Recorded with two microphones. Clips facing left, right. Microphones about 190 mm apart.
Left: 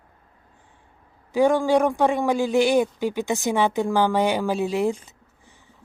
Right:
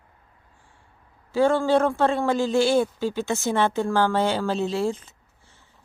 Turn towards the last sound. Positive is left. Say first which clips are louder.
# left 2 dB
turn(degrees=15)  # may be behind; listen again after turning